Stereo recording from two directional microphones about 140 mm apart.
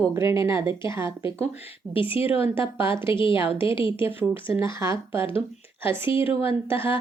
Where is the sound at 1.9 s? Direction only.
40° left (ahead or behind).